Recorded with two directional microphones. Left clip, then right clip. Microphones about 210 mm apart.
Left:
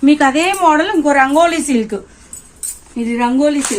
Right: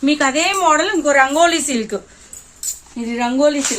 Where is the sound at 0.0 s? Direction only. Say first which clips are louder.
Left 4 dB; 5° right (ahead or behind); by 2.0 s 25° right (ahead or behind).